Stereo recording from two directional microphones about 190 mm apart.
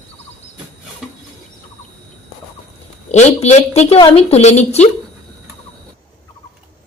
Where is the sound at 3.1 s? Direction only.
35° left (ahead or behind).